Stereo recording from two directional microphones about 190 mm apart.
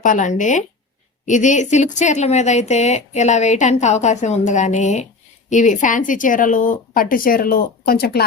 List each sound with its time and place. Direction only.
0.0 s a woman's voice: 40° left (ahead or behind)